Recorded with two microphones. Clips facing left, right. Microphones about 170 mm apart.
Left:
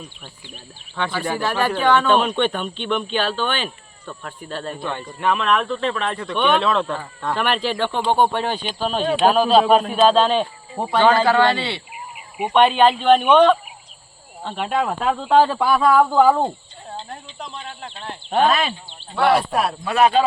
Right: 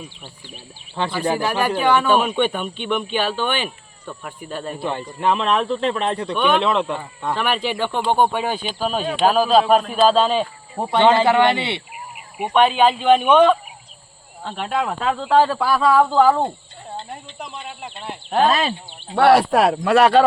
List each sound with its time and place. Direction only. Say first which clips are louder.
1.0 s speech: right 1 dB; 35° right (ahead or behind)
1.4 s speech: right 1 dB; 15° right (ahead or behind)
4.8 s speech: right 4 dB; 30° right (ahead or behind)
6.3 s speech: left 1 dB; 5° right (ahead or behind)
6.6 s speech: right 1 dB; 20° right (ahead or behind); by 10.4 s 5° right (ahead or behind)
10.9 s speech: right 1 dB; 25° right (ahead or behind)
12.5 s speech: left 1 dB; 5° right (ahead or behind)
17.3 s speech: even; 10° right (ahead or behind)
19.1 s speech: right 4 dB; 65° right (ahead or behind)